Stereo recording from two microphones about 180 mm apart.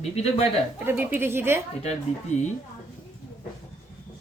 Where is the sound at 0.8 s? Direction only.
10° right (ahead or behind).